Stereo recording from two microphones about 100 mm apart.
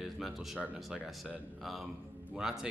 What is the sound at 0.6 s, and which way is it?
Speech, 10° right (ahead or behind).